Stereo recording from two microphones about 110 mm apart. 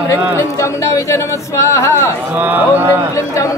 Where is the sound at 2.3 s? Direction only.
15° right (ahead or behind).